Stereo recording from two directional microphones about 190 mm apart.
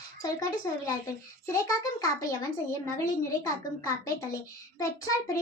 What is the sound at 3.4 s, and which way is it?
A child's voice, 15° left (ahead or behind).